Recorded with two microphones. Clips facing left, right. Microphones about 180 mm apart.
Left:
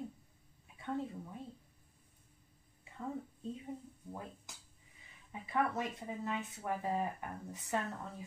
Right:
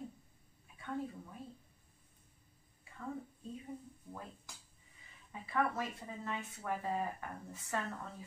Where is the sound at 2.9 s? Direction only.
20° left (ahead or behind).